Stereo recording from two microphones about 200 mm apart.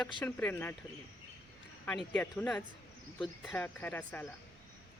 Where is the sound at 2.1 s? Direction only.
10° left (ahead or behind).